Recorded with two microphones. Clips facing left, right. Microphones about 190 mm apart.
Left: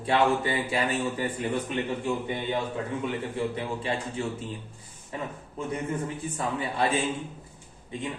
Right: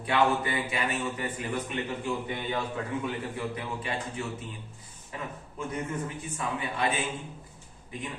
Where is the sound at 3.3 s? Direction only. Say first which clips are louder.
Left 4 dB; 30° left (ahead or behind).